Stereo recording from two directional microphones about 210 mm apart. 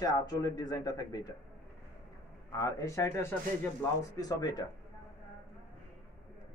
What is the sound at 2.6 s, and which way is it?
Speech, 15° left (ahead or behind).